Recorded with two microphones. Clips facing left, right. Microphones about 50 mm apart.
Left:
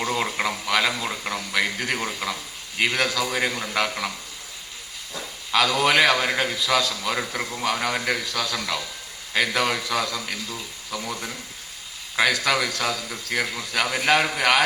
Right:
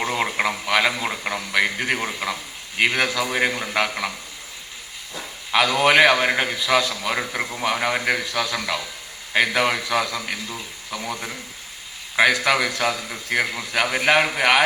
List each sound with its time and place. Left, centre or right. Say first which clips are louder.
0.0 s a sound: right 2 dB; right
1.6 s a man's voice: right 3 dB; right
5.5 s a man's voice: right 3 dB; right